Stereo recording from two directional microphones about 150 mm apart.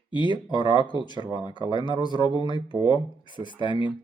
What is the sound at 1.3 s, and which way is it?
Speech, 30° right (ahead or behind).